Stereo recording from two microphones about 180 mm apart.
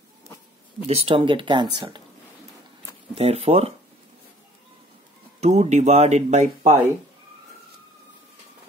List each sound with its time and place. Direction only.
0.8 s speech: 30° right (ahead or behind)
3.2 s speech: 35° right (ahead or behind)
5.4 s speech: 40° right (ahead or behind)